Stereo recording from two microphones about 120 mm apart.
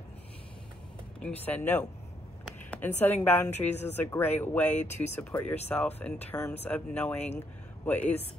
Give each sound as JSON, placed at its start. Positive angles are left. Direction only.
{"t": 1.4, "sound": "a woman's voice", "side_deg": 15}